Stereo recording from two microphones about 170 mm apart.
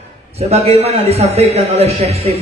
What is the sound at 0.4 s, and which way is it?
A man's voice, 40° right (ahead or behind).